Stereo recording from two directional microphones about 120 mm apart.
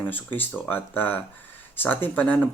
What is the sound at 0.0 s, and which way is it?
Speech, 15° left (ahead or behind).